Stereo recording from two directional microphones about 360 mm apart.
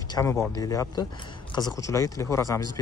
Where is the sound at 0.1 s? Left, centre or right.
Centre.